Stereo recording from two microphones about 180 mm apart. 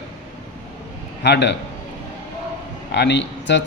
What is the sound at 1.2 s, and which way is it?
Speech, 75° left (ahead or behind).